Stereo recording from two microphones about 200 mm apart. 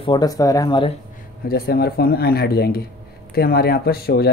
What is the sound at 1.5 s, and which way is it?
Speech, 50° left (ahead or behind).